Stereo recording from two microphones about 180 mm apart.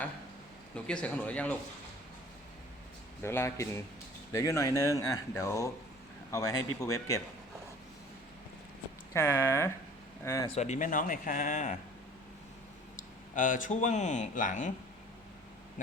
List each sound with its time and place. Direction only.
0.9 s speech: 5° left (ahead or behind)
3.2 s a man's voice: 15° left (ahead or behind)
9.1 s speech: 15° left (ahead or behind)
10.5 s speech: 40° left (ahead or behind)
13.0 s speech: 45° left (ahead or behind)